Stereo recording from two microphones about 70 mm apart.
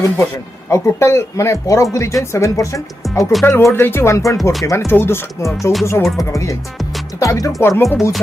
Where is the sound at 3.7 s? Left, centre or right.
Left.